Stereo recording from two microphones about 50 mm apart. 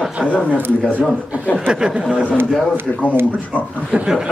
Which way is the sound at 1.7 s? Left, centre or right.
Centre.